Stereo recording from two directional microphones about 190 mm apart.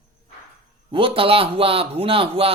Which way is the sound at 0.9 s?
30° right (ahead or behind).